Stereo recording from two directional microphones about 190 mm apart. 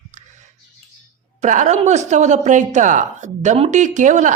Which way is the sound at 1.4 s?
40° right (ahead or behind).